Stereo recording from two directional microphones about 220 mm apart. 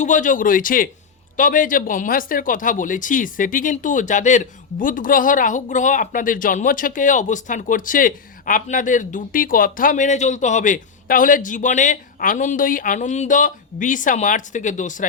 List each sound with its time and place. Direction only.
0.0 s speech: 35° left (ahead or behind)